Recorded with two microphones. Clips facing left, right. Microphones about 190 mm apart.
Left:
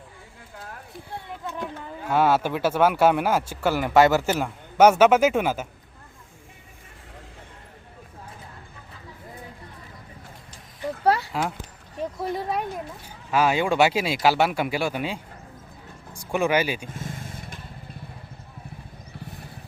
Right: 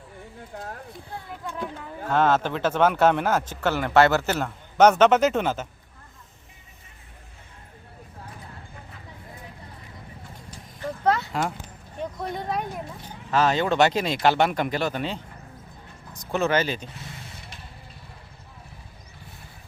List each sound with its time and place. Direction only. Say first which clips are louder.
1.6 s speech: even; 10° left (ahead or behind)
11.0 s a sound: left 1 dB; 10° left (ahead or behind)
12.1 s speech: left 2 dB; 5° left (ahead or behind)
16.9 s vehicle: left 6 dB; 50° left (ahead or behind)